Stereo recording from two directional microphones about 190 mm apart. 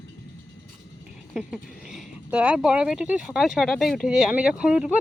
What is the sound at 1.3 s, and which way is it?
Speech, centre (ahead or behind).